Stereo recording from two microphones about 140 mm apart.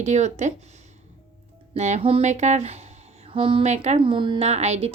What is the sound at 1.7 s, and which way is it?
Speech, 55° right (ahead or behind).